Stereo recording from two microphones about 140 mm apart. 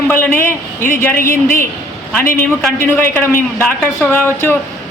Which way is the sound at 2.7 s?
15° left (ahead or behind).